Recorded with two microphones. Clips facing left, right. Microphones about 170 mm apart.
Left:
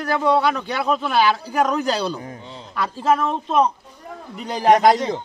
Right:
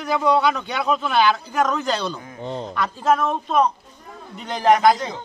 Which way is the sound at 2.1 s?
35° left (ahead or behind).